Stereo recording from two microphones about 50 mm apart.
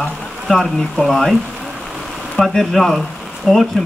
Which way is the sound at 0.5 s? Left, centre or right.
Centre.